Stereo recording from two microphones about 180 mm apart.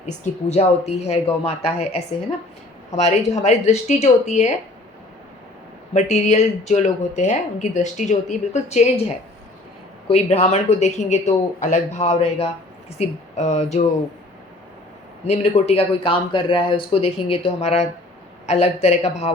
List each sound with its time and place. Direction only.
0.0 s a woman's voice: 35° left (ahead or behind)
5.9 s a woman's voice: 40° left (ahead or behind)
10.1 s a woman's voice: 35° left (ahead or behind)
15.2 s a woman's voice: 35° left (ahead or behind)